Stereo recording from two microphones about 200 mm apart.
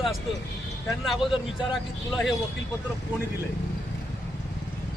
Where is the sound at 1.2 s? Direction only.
25° left (ahead or behind).